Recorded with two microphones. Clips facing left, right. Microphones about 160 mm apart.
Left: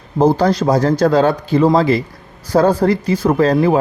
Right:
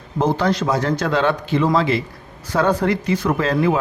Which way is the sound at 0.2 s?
35° left (ahead or behind).